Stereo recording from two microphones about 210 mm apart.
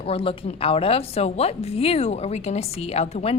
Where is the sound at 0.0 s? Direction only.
25° left (ahead or behind).